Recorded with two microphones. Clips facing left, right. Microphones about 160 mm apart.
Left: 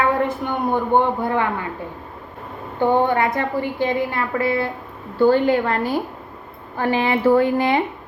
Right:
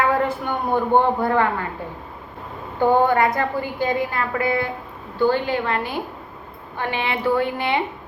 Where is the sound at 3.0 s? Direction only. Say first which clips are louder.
Right 1 dB; 25° left (ahead or behind).